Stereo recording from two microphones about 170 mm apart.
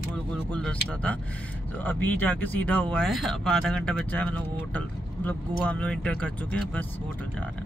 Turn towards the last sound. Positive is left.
turn(degrees=5)  # may be behind; listen again after turning